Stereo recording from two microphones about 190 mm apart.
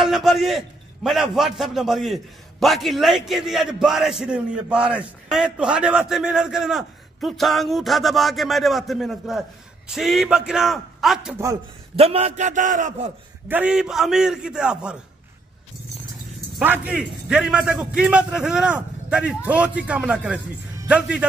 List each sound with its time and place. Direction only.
0.0 s a man's voice: centre (ahead or behind)
11.3 s a man's voice: 15° right (ahead or behind)
12.0 s a man's voice: 30° right (ahead or behind)
13.5 s a man's voice: 5° right (ahead or behind)
16.5 s a man's voice: 10° right (ahead or behind)